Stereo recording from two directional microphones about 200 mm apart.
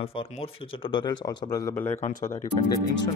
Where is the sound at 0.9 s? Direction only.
20° left (ahead or behind).